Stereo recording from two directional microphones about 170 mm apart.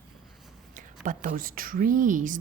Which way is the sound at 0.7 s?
50° right (ahead or behind).